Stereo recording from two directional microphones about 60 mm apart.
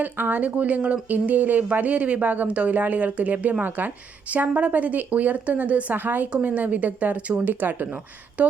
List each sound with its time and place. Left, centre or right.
0.0 s speech: right